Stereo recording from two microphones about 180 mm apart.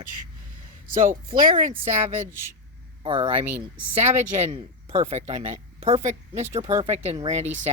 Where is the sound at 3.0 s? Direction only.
30° right (ahead or behind).